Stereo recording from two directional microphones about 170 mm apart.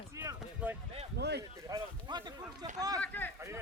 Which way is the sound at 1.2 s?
75° right (ahead or behind).